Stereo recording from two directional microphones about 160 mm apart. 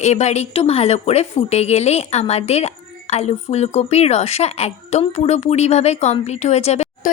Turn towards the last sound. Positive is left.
turn(degrees=45)  # may be behind; listen again after turning